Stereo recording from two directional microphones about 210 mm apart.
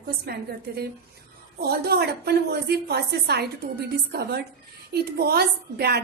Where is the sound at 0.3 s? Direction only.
50° right (ahead or behind).